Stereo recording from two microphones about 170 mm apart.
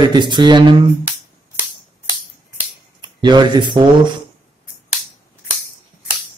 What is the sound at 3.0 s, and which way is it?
Speech, 25° right (ahead or behind).